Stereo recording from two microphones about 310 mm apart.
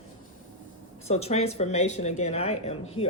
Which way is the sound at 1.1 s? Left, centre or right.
Left.